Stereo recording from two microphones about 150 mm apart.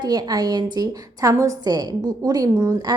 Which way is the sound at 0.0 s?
30° right (ahead or behind).